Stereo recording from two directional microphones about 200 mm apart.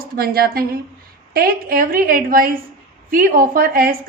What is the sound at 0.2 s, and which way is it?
A woman's voice, 50° right (ahead or behind).